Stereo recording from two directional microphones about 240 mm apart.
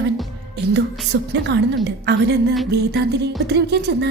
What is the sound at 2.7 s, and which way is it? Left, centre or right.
Music, right.